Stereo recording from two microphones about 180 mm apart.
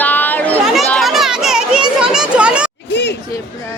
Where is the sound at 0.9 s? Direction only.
Centre (ahead or behind).